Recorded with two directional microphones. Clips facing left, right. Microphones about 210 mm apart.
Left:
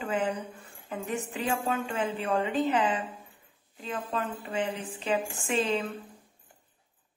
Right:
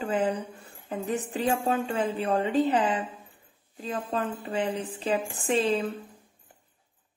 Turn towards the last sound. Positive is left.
turn(degrees=-35)  # may be behind; listen again after turning